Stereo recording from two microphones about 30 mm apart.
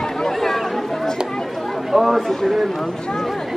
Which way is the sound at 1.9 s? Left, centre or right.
Centre.